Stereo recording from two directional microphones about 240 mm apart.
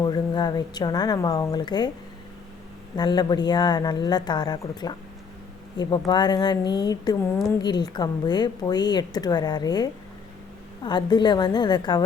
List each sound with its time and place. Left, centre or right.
0.0 s a woman's voice: centre
2.9 s a woman's voice: centre